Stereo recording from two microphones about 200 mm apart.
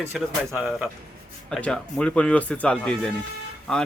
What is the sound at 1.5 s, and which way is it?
A man's voice, 5° left (ahead or behind).